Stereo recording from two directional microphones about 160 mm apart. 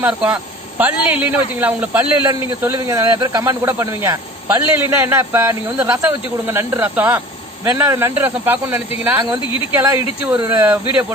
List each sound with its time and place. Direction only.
0.0 s speech: 5° right (ahead or behind)
2.2 s a man's voice: 25° right (ahead or behind)